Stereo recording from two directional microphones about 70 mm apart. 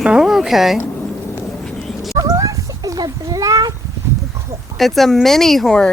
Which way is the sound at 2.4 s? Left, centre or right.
Right.